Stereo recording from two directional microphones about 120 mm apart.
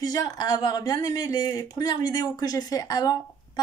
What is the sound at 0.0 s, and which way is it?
Speech, 30° left (ahead or behind).